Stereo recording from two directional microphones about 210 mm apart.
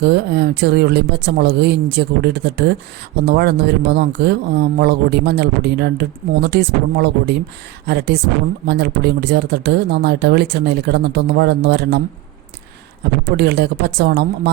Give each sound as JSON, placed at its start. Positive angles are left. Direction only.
{"t": 0.0, "sound": "speech", "side_deg": -50}
{"t": 13.2, "sound": "speech", "side_deg": -50}